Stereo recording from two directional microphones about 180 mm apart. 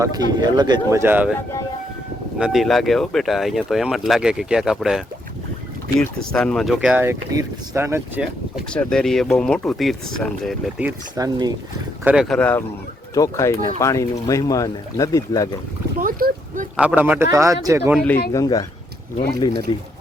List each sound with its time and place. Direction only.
0.0 s speech: 20° right (ahead or behind)
2.4 s speech: centre (ahead or behind)
6.7 s speech: 10° right (ahead or behind)
8.7 s speech: 5° left (ahead or behind)
11.2 s speech: 20° right (ahead or behind)
12.0 s speech: 5° right (ahead or behind); by 15.4 s 20° left (ahead or behind)
16.0 s boat: 50° right (ahead or behind)
17.0 s speech: 10° right (ahead or behind)
17.9 s speech: 10° left (ahead or behind)
18.3 s speech: 20° left (ahead or behind)